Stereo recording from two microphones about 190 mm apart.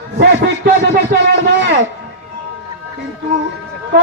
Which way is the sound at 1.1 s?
55° right (ahead or behind).